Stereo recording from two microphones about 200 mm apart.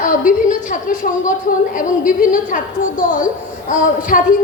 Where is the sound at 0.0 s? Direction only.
40° left (ahead or behind).